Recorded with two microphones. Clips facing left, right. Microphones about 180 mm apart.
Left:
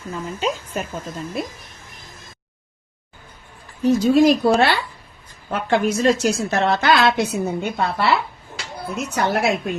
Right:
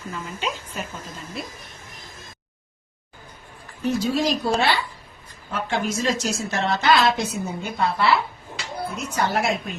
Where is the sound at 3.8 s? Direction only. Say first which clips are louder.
Left 8 dB; 55° left (ahead or behind).